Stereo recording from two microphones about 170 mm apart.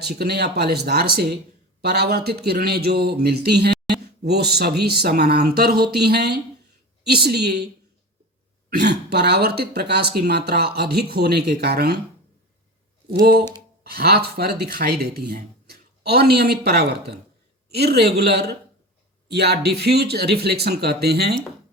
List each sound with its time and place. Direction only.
0.0 s a man's voice: 70° right (ahead or behind)
8.7 s a man's voice: 75° right (ahead or behind)
13.1 s a man's voice: 65° right (ahead or behind)